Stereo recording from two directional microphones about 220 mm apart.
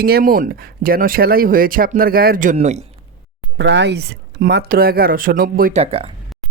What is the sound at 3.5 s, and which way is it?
Speech, 55° right (ahead or behind).